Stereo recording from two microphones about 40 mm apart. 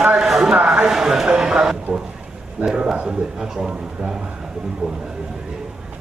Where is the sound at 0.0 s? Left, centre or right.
Centre.